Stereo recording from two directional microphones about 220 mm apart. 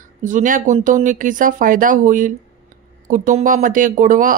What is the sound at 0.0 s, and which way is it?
Speech, 35° right (ahead or behind).